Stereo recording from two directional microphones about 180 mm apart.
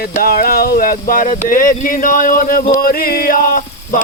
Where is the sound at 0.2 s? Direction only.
55° left (ahead or behind).